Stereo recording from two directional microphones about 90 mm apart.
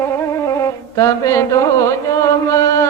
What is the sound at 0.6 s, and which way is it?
Music, 35° left (ahead or behind).